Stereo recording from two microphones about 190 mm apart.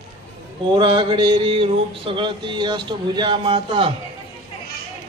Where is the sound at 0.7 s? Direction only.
25° right (ahead or behind).